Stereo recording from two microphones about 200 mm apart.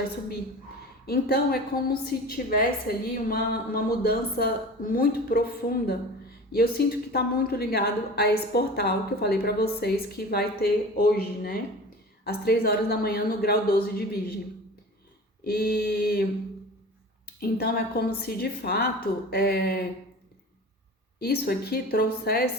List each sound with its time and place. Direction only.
1.0 s a woman's voice: 50° left (ahead or behind)
15.4 s a woman's voice: 50° left (ahead or behind)
17.2 s a woman's voice: 50° left (ahead or behind)
21.2 s a woman's voice: 50° left (ahead or behind)